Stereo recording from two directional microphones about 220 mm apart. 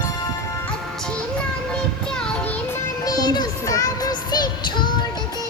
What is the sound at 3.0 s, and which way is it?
Music, 15° left (ahead or behind).